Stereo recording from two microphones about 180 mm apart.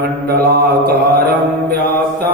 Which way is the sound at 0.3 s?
60° right (ahead or behind).